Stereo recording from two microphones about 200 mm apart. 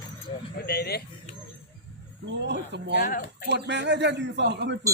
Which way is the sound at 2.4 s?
60° right (ahead or behind).